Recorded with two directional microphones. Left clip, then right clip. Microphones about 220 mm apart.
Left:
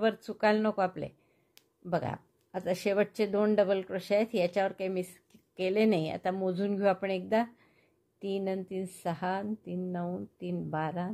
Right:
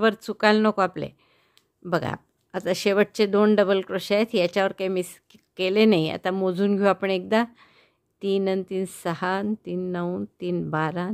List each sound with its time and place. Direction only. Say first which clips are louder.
0.0 s speech: right 7 dB; 30° right (ahead or behind)